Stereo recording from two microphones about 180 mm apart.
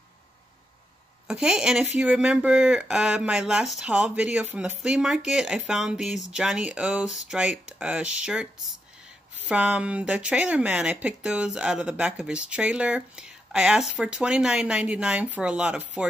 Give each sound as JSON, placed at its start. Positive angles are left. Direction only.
{"t": 1.2, "sound": "speech", "side_deg": -5}
{"t": 9.5, "sound": "speech", "side_deg": -5}